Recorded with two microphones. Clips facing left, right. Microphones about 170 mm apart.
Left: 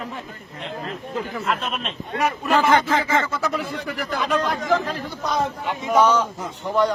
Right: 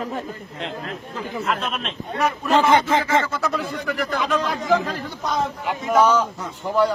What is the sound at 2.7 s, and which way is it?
Speech, 25° right (ahead or behind).